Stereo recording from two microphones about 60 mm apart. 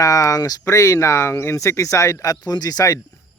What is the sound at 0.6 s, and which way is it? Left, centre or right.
Speech, left.